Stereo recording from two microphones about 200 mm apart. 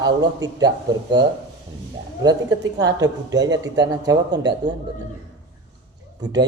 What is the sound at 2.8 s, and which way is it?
Speech, 20° right (ahead or behind).